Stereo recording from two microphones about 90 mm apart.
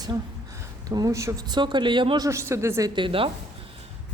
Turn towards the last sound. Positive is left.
turn(degrees=-75)  # may be behind; listen again after turning